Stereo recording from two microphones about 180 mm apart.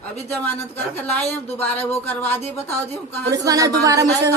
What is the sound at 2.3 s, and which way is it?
Speech, 10° left (ahead or behind).